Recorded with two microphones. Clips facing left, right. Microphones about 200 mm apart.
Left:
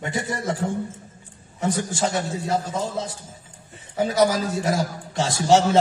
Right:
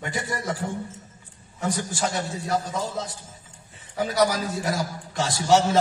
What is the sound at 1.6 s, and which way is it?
A man's voice, 25° left (ahead or behind).